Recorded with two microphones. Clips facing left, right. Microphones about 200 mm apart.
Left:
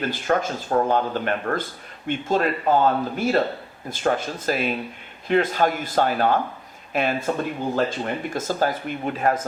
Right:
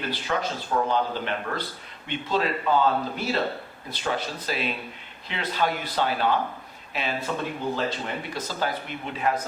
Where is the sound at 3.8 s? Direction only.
50° left (ahead or behind).